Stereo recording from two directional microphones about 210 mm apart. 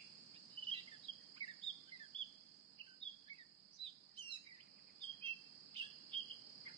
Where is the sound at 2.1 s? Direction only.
25° right (ahead or behind).